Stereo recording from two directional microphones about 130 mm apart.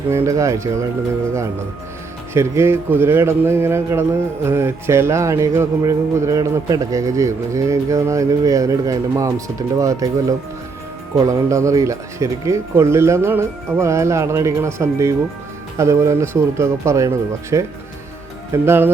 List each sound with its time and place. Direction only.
0.1 s speech: 25° right (ahead or behind)
2.3 s speech: 20° right (ahead or behind)